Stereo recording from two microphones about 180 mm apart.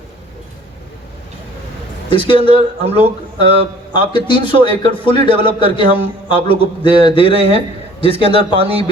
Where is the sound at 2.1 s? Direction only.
30° left (ahead or behind).